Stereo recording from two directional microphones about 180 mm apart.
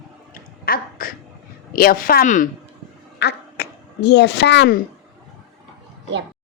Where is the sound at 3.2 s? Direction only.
65° left (ahead or behind).